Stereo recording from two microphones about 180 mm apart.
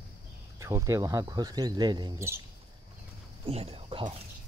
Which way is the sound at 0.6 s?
15° right (ahead or behind).